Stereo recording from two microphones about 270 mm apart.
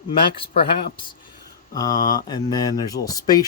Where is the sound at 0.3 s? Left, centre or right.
Centre.